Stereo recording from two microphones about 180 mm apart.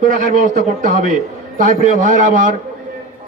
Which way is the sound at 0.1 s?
45° right (ahead or behind).